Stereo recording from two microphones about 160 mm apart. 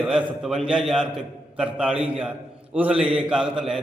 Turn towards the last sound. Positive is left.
turn(degrees=-5)  # may be behind; listen again after turning